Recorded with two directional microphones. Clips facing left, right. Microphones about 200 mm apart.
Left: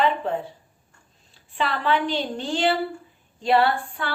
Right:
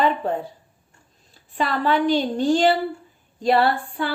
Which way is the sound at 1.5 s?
40° right (ahead or behind).